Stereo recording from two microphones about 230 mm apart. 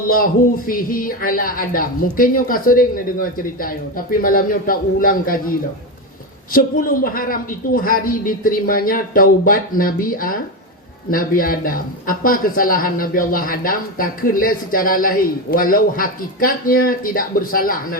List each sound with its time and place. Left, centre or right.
0.7 s speech: left